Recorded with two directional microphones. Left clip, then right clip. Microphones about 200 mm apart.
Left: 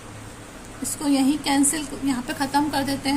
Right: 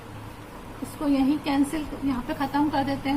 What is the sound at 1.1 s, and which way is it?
A woman's voice, 55° left (ahead or behind).